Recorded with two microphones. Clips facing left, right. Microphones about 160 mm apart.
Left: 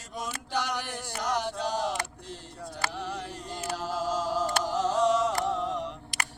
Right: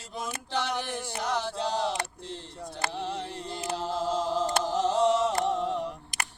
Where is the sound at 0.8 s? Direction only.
15° left (ahead or behind).